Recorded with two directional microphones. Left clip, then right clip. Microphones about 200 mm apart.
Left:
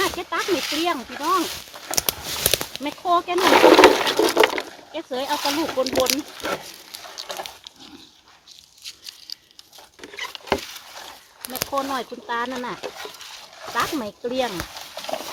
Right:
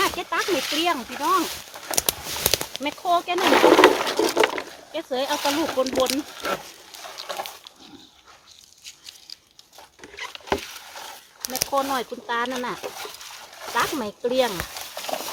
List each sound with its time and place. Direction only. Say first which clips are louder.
0.2 s speech: even; 35° right (ahead or behind)
0.6 s speech: even; 5° left (ahead or behind)
0.9 s speech: even; 30° right (ahead or behind)
2.2 s a sound: left 1 dB; 20° left (ahead or behind)
2.8 s speech: left 1 dB; 30° right (ahead or behind)
3.4 s speech: left 3 dB; 30° left (ahead or behind)
4.7 s speech: right 1 dB; 20° right (ahead or behind)
5.8 s speech: left 3 dB; 25° left (ahead or behind)
6.1 s speech: even; 20° right (ahead or behind)
7.0 s a sound: right 1 dB; 25° right (ahead or behind)
8.8 s biting: left 5 dB; 25° left (ahead or behind)
10.0 s a sound: left 3 dB; 30° left (ahead or behind)
11.1 s speech: right 5 dB; 30° right (ahead or behind)
14.9 s horse: even; 20° right (ahead or behind)